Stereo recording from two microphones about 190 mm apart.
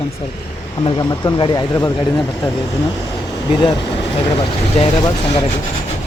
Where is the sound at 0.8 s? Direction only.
25° left (ahead or behind).